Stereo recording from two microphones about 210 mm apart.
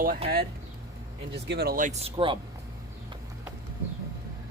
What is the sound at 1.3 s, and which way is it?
Speech, 50° right (ahead or behind).